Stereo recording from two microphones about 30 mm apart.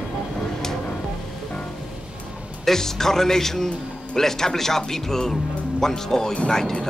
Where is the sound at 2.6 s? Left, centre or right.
Centre.